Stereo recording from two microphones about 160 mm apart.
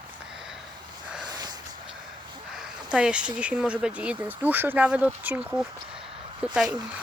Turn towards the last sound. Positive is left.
turn(degrees=-5)  # may be behind; listen again after turning